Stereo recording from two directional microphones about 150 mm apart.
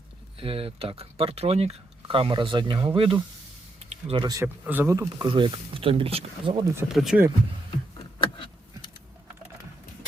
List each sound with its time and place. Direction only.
0.3 s speech: 40° right (ahead or behind)
3.8 s a sound: 45° right (ahead or behind)
4.2 s speech: 25° right (ahead or behind)
4.4 s speech: 10° right (ahead or behind); by 6.7 s 35° right (ahead or behind)
6.8 s speech: 5° right (ahead or behind)
7.9 s vehicle: 30° left (ahead or behind)